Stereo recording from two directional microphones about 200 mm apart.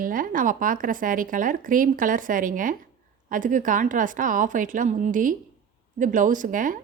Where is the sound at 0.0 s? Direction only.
45° right (ahead or behind).